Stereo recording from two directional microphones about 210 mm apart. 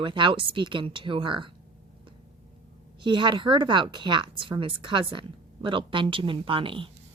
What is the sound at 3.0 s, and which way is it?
A woman's voice, 20° right (ahead or behind).